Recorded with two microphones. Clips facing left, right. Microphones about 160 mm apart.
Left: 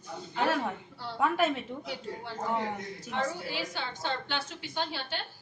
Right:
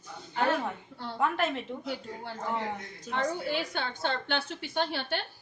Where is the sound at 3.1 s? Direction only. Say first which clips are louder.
Right 3 dB; 55° right (ahead or behind).